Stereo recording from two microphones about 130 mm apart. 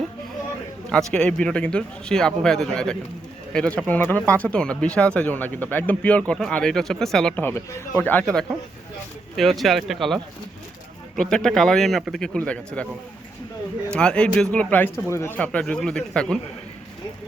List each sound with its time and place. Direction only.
0.9 s speech: 5° left (ahead or behind)
7.4 s speech: 20° left (ahead or behind); by 10.2 s centre (ahead or behind)
11.2 s speech: 5° left (ahead or behind)
13.9 s speech: 5° left (ahead or behind)
15.4 s speech: 10° left (ahead or behind)